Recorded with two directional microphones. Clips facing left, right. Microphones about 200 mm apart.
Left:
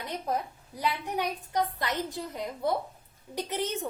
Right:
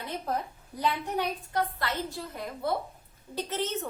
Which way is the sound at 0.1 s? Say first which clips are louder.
Left 1 dB; 15° left (ahead or behind).